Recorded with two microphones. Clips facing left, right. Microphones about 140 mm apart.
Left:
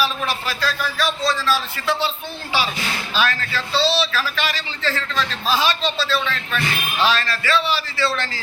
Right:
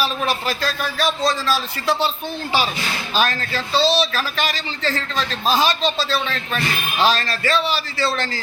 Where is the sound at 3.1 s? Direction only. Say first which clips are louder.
Right 2 dB; 45° right (ahead or behind).